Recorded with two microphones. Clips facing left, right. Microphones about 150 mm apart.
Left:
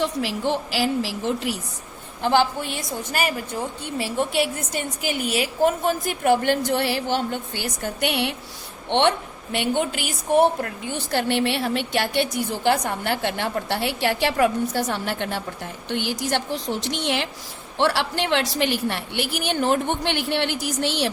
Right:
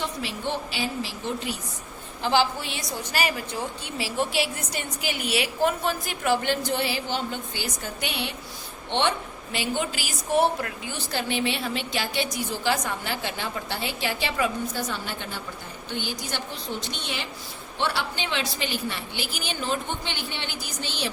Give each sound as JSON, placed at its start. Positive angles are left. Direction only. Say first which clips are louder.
{"t": 0.0, "sound": "a woman's voice", "louder": "left 6 dB", "side_deg": 75}
{"t": 2.2, "sound": "a woman's voice", "louder": "left 3 dB", "side_deg": 55}